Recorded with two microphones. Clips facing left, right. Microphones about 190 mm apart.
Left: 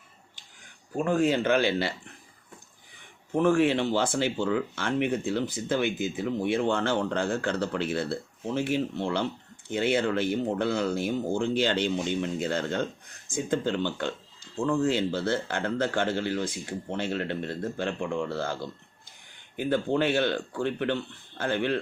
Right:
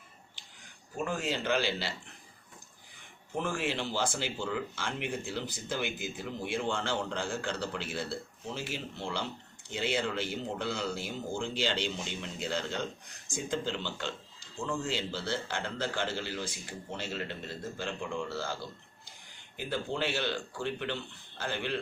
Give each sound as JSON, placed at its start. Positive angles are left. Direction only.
{"t": 0.9, "sound": "speech", "side_deg": 55}
{"t": 3.3, "sound": "speech", "side_deg": 60}
{"t": 19.5, "sound": "speech", "side_deg": 55}